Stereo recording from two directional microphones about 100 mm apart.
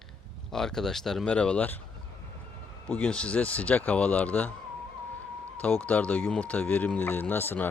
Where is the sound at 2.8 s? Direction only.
15° left (ahead or behind).